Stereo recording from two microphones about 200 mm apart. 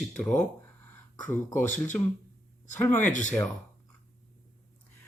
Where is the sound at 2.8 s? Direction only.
10° left (ahead or behind).